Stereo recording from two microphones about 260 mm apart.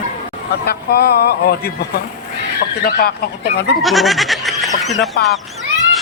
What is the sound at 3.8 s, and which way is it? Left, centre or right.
Goat, centre.